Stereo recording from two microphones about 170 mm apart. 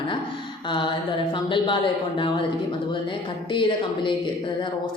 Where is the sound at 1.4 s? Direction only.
30° left (ahead or behind).